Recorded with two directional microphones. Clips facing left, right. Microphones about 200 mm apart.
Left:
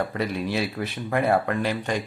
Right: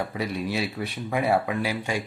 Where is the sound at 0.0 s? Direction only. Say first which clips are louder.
Left 2 dB; 5° right (ahead or behind).